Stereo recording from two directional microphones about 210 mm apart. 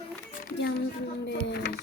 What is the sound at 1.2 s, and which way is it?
Music, 50° left (ahead or behind).